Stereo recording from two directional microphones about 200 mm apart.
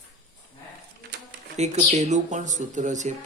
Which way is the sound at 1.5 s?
35° right (ahead or behind).